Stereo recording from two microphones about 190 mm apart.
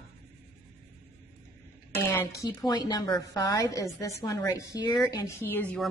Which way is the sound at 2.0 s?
15° left (ahead or behind).